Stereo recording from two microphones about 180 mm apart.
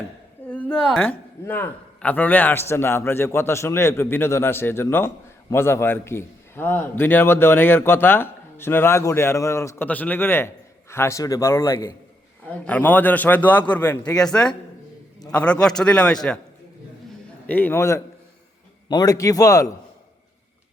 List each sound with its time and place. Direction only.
0.4 s a man's voice: 5° left (ahead or behind)
17.4 s a man's voice: 10° left (ahead or behind)